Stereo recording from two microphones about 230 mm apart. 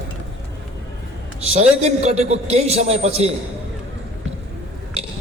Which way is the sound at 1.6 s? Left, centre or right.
Right.